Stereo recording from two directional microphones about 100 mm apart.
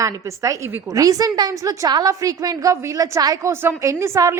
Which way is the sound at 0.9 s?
35° right (ahead or behind).